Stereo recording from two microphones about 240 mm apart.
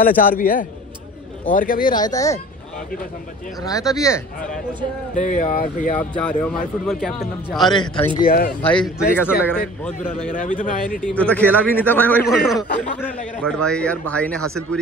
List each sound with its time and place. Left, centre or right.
0.0 s speech: left
2.0 s a man's voice: centre
3.6 s a man's voice: centre
5.1 s speech: left
5.9 s speech: centre
8.2 s speech: left
8.6 s a man's voice: centre
10.3 s speech: left
11.0 s a man's voice: centre